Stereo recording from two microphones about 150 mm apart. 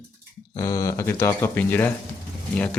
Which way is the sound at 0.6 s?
25° left (ahead or behind).